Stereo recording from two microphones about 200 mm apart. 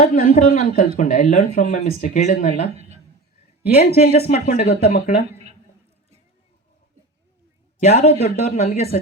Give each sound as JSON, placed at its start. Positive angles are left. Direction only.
{"t": 0.0, "sound": "speech", "side_deg": 40}
{"t": 3.6, "sound": "speech", "side_deg": 50}
{"t": 7.9, "sound": "speech", "side_deg": 30}